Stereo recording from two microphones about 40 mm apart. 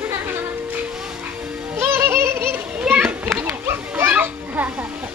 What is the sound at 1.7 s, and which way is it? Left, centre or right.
Music, right.